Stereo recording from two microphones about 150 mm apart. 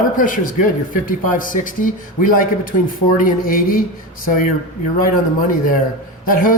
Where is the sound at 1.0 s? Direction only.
65° left (ahead or behind).